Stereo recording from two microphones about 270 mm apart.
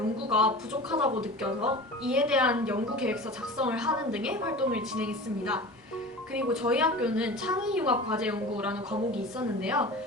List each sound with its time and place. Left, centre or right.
0.3 s a woman's voice: centre